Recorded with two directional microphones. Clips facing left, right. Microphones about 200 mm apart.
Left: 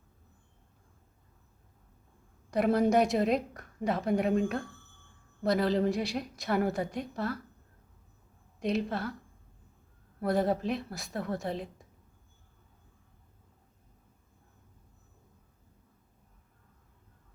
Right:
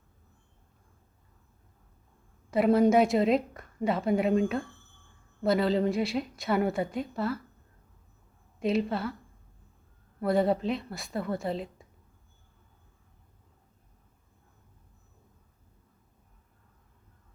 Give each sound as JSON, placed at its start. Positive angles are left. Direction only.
{"t": 2.5, "sound": "a woman's voice", "side_deg": 0}
{"t": 8.5, "sound": "a woman's voice", "side_deg": 0}
{"t": 10.2, "sound": "a woman's voice", "side_deg": 0}